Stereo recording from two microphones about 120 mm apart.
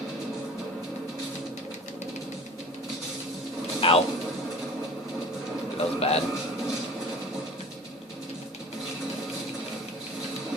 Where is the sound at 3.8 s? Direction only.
50° left (ahead or behind).